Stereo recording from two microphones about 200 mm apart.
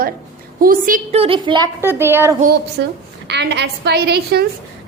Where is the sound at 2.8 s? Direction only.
60° right (ahead or behind).